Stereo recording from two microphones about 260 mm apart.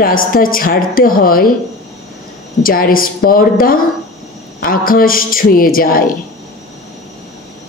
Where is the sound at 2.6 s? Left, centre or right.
Left.